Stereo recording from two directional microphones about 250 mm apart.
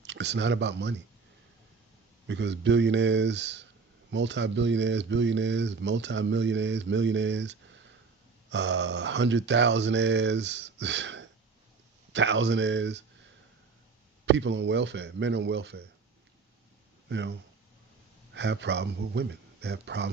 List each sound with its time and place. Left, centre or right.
0.0 s speech: right
2.2 s speech: right
14.3 s speech: right
17.1 s speech: right
18.3 s speech: right